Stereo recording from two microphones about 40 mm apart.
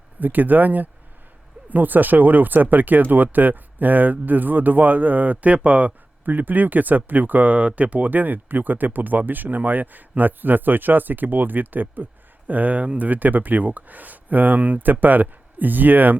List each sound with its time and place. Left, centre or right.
0.2 s speech: right
6.2 s speech: right